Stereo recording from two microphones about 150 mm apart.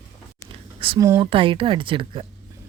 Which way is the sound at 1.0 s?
20° right (ahead or behind).